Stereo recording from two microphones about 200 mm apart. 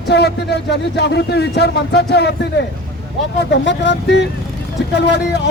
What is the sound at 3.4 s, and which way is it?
Speech, 60° left (ahead or behind).